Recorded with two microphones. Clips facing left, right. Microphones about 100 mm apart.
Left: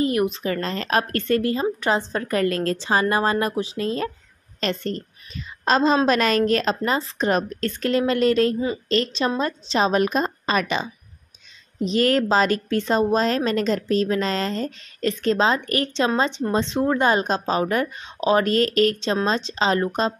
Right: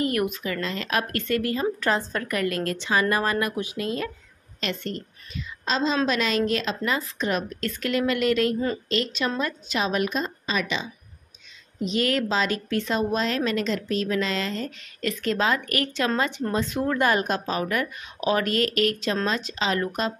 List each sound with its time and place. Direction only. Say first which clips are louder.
0.0 s a woman's voice: left 4 dB; 25° left (ahead or behind)
5.7 s a woman's voice: left 6 dB; 50° left (ahead or behind); by 20.2 s 30° left (ahead or behind)